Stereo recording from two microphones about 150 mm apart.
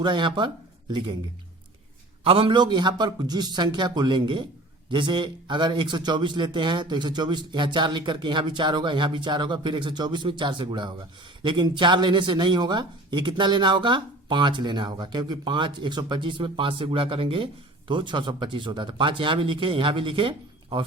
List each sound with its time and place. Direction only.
0.0 s speech: 30° right (ahead or behind)
2.2 s a man's voice: 35° right (ahead or behind)